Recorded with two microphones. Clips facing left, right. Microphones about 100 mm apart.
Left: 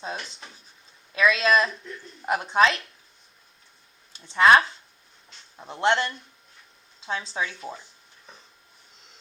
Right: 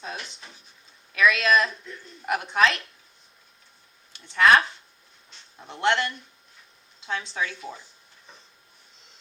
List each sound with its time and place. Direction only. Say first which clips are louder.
0.0 s speech: left 2 dB; 30° left (ahead or behind)
4.1 s speech: left 2 dB; 25° left (ahead or behind)
5.6 s speech: left 1 dB; 30° left (ahead or behind)